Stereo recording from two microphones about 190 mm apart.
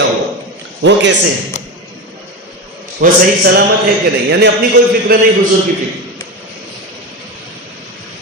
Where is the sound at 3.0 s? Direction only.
45° right (ahead or behind).